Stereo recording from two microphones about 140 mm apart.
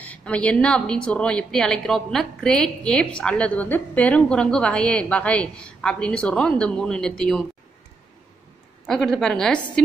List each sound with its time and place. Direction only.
0.0 s a woman's voice: 10° left (ahead or behind)
8.8 s a woman's voice: centre (ahead or behind)